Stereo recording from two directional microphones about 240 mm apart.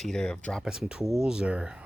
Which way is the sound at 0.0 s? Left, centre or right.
Centre.